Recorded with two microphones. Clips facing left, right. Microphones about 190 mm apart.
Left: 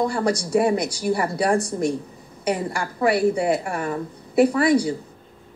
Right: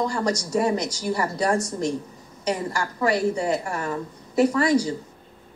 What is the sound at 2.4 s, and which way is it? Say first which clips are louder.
A woman's voice: left 2 dB; 10° left (ahead or behind).